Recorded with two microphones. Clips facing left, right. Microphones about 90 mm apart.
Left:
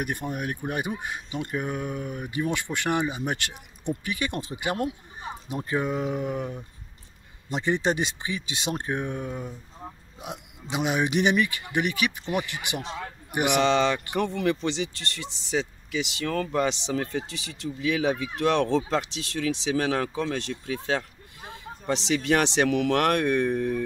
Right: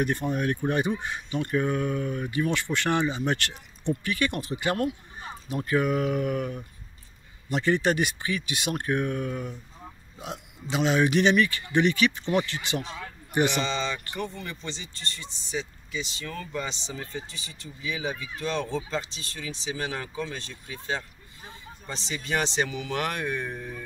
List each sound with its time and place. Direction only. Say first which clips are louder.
0.0 s speech: right 4 dB; 15° left (ahead or behind)
13.6 s speech: left 7 dB; 70° left (ahead or behind)